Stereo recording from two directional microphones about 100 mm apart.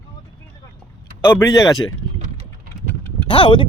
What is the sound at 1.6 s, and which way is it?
Speech, 35° left (ahead or behind).